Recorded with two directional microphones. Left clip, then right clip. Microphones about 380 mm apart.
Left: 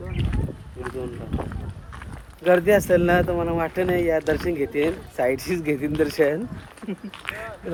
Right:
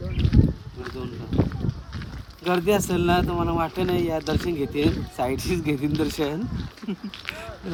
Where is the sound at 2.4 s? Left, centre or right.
Centre.